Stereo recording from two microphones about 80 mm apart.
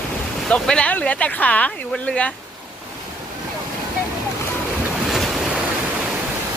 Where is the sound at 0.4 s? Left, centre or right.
Centre.